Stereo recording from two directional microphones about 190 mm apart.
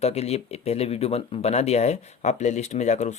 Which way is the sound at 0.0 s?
35° left (ahead or behind).